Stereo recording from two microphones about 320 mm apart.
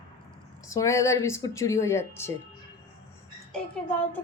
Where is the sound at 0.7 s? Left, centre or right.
Centre.